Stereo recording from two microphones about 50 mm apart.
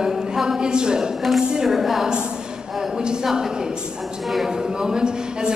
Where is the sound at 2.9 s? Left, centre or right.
Centre.